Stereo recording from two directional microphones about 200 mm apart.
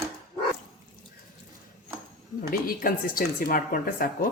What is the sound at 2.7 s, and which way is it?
Speech, 45° left (ahead or behind).